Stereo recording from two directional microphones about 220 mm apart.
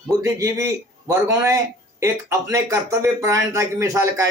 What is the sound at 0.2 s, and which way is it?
A man's voice, 15° right (ahead or behind).